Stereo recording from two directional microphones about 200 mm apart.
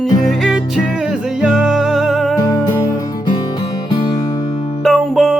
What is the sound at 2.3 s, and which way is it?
Music, 20° left (ahead or behind).